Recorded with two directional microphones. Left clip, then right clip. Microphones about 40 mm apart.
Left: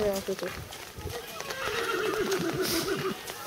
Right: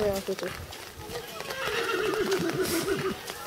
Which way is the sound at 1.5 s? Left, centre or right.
Centre.